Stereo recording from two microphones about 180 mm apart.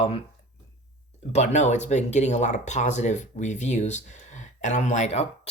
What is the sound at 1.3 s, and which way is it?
Speech, 40° left (ahead or behind).